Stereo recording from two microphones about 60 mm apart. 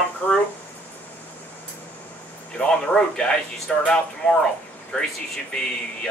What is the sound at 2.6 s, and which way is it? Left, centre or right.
Speech, centre.